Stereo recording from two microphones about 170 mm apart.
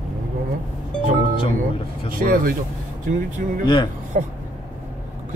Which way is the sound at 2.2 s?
55° right (ahead or behind).